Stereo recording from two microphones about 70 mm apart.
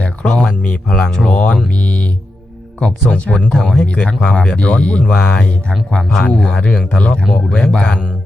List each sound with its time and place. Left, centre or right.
0.3 s speech: centre
3.5 s speech: centre
3.8 s speech: centre